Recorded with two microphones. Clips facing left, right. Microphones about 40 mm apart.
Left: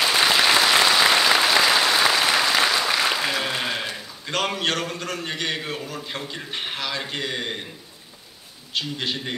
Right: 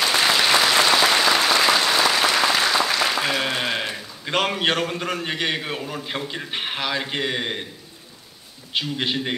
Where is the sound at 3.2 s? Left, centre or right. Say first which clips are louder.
Right 2 dB; centre.